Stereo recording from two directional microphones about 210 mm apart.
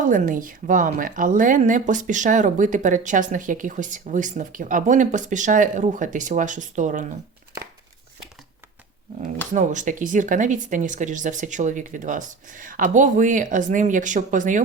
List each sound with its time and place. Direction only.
0.0 s a woman's voice: 40° right (ahead or behind)
9.5 s a woman's voice: 35° right (ahead or behind)